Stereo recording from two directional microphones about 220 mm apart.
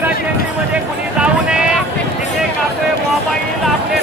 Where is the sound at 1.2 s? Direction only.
5° right (ahead or behind).